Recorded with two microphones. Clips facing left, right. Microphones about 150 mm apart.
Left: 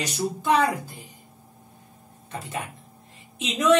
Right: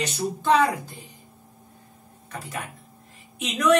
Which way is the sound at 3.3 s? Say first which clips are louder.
Even; 25° left (ahead or behind).